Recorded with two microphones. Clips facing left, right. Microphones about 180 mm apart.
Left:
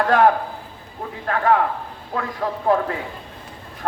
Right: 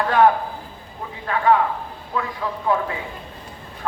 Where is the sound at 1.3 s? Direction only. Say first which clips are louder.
Even; 50° left (ahead or behind).